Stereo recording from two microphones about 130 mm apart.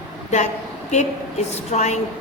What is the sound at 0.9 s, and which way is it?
A woman's voice, 60° left (ahead or behind).